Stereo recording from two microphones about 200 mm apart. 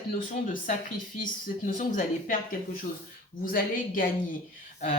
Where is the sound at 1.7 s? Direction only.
40° left (ahead or behind).